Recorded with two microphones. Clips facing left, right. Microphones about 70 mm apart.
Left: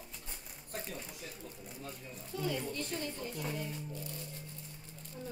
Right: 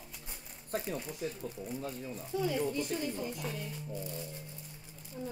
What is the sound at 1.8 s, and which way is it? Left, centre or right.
Speech, centre.